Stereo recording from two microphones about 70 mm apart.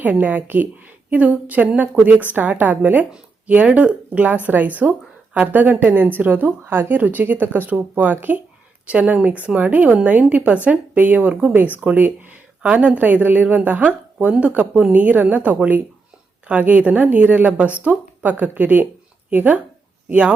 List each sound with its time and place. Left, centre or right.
0.0 s a woman's voice: right